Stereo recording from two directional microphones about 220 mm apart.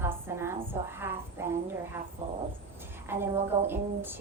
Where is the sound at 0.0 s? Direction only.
10° right (ahead or behind).